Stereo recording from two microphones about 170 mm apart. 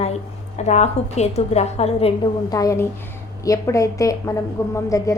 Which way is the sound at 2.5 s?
20° left (ahead or behind).